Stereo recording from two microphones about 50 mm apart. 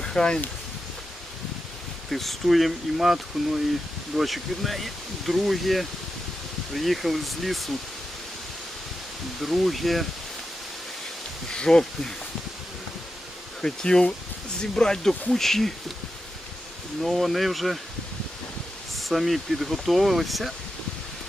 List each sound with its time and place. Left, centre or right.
0.0 s speech: centre
2.0 s speech: centre
9.4 s speech: centre
11.5 s speech: centre
13.6 s speech: centre
17.0 s speech: centre
18.9 s speech: centre